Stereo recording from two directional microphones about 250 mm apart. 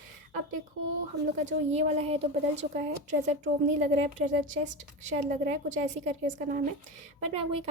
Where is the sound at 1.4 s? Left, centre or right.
Right.